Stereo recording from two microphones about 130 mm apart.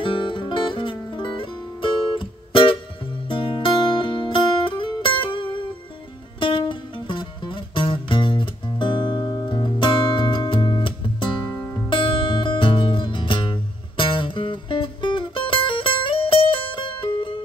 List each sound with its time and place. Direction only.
0.0 s music: 40° left (ahead or behind)